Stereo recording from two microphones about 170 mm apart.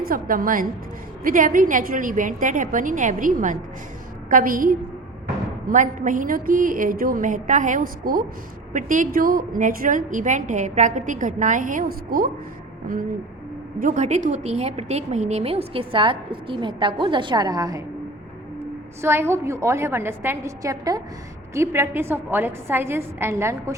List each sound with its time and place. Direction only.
0.0 s a woman's voice: 60° right (ahead or behind)
13.7 s a woman's voice: 50° right (ahead or behind); by 17.8 s 20° right (ahead or behind)
19.0 s a woman's voice: 15° right (ahead or behind)